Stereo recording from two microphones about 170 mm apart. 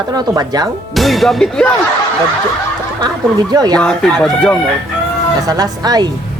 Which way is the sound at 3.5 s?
25° right (ahead or behind).